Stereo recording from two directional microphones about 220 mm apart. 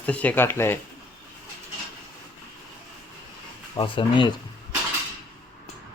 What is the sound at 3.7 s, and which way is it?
Speech, 20° left (ahead or behind).